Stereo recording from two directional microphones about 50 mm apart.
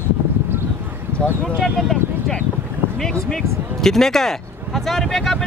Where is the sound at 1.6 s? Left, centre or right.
Centre.